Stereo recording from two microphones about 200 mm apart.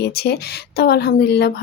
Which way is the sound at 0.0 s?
55° left (ahead or behind).